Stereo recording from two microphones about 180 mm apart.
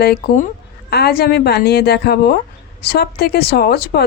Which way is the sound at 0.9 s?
60° left (ahead or behind).